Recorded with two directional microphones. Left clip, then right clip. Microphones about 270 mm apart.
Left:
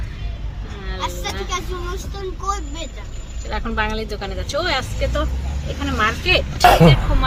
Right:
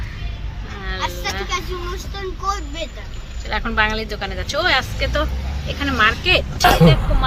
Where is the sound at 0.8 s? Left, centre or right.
Centre.